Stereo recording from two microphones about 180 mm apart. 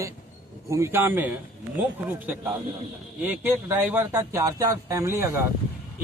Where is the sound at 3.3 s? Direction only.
10° right (ahead or behind).